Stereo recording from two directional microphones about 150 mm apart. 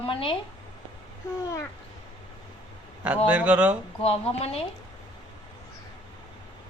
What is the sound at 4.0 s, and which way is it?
Speech, 40° left (ahead or behind).